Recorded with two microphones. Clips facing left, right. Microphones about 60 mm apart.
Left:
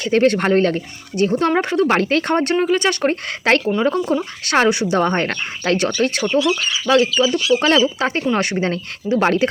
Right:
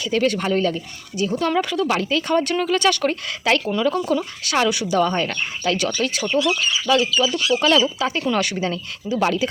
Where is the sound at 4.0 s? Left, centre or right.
Centre.